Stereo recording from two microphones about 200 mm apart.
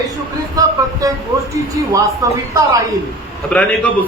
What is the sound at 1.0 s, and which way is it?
A man's voice, 15° right (ahead or behind).